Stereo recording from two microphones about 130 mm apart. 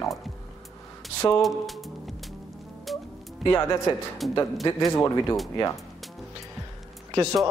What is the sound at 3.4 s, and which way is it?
Speech, 30° left (ahead or behind).